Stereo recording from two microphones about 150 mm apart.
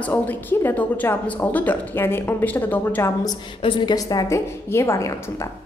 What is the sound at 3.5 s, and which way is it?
A woman's voice, 35° left (ahead or behind).